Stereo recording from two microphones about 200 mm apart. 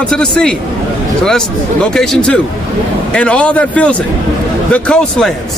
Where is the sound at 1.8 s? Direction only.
5° left (ahead or behind).